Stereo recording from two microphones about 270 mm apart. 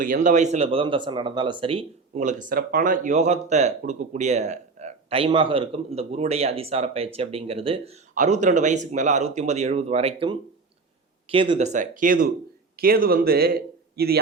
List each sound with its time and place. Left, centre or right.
0.0 s speech: right